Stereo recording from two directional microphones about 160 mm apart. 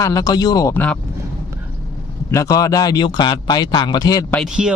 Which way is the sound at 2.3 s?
20° left (ahead or behind).